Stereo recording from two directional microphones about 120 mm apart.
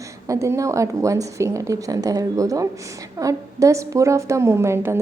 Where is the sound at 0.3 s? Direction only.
25° right (ahead or behind).